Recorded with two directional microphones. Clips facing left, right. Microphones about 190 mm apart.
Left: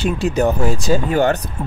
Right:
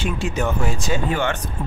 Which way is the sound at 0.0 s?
35° left (ahead or behind).